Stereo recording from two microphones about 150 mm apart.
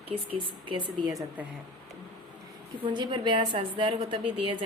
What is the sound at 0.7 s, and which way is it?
Speech, 30° right (ahead or behind).